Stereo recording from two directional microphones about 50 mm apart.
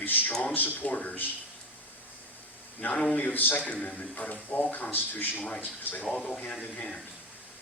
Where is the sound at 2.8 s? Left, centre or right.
Left.